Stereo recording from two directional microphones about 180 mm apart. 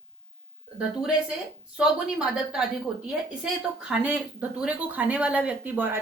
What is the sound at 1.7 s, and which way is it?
A woman's voice, 5° right (ahead or behind).